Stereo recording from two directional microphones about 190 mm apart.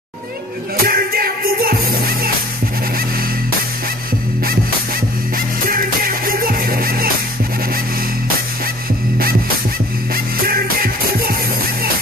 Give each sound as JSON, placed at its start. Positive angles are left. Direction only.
{"t": 0.7, "sound": "music", "side_deg": -50}
{"t": 5.7, "sound": "music", "side_deg": -50}
{"t": 10.1, "sound": "music", "side_deg": -50}